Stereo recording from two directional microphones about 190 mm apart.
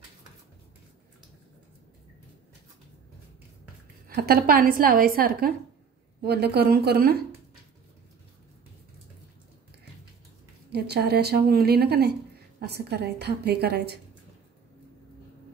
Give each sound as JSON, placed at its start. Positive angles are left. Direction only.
{"t": 4.1, "sound": "a woman's voice", "side_deg": -55}
{"t": 10.7, "sound": "speech", "side_deg": -60}